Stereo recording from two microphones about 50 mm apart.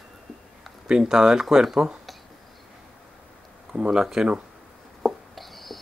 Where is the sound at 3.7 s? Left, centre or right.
Right.